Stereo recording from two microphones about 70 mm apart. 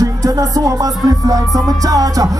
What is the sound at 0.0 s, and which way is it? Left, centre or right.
Music, right.